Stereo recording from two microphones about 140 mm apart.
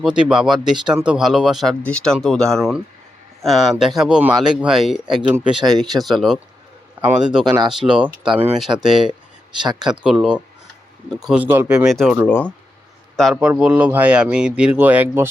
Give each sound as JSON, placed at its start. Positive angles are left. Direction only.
{"t": 0.0, "sound": "speech", "side_deg": -5}
{"t": 1.8, "sound": "speech", "side_deg": 10}
{"t": 12.3, "sound": "speech", "side_deg": 15}
{"t": 13.3, "sound": "speech", "side_deg": -10}